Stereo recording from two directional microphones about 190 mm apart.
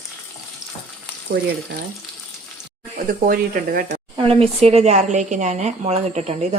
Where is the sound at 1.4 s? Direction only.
70° right (ahead or behind).